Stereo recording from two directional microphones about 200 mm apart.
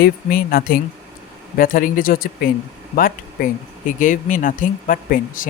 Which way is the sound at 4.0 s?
40° left (ahead or behind).